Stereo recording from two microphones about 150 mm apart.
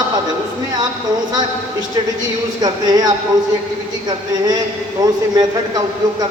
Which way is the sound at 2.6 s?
25° right (ahead or behind).